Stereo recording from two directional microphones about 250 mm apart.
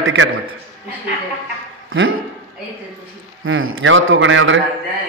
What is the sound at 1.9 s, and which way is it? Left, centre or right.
Speech, right.